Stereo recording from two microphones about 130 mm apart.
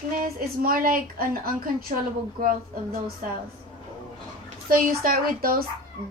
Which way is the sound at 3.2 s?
90° right.